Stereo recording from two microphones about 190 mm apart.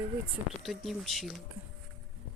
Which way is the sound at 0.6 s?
Centre (ahead or behind).